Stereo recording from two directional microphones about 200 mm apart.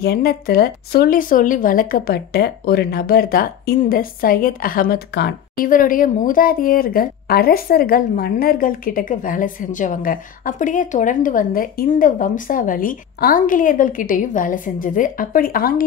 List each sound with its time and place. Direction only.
0.0 s speech: 50° left (ahead or behind)